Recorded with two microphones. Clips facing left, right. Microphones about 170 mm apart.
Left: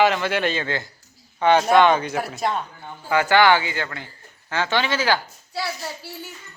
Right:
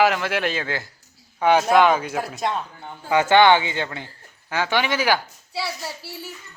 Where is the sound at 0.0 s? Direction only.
Centre (ahead or behind).